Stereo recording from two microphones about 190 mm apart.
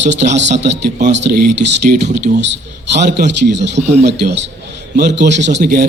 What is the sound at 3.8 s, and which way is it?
Speech, 35° right (ahead or behind).